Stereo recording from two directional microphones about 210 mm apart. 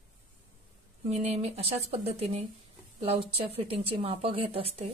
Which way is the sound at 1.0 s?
30° right (ahead or behind).